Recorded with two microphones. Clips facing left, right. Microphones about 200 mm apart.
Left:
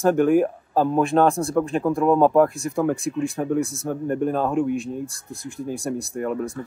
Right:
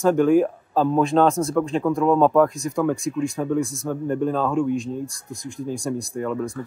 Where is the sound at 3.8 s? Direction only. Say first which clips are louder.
Even; 50° left (ahead or behind).